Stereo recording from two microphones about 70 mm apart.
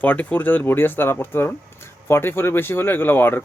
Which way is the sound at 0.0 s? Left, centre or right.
Left.